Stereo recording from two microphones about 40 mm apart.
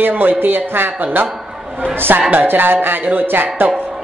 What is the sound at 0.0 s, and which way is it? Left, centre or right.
Speech, right.